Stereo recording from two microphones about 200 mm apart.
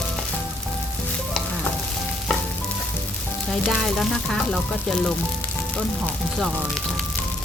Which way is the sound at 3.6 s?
5° left (ahead or behind).